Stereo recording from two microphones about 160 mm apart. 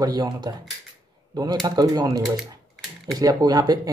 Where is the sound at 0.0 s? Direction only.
25° right (ahead or behind).